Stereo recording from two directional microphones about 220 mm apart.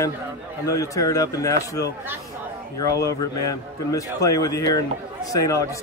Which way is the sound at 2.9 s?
15° left (ahead or behind).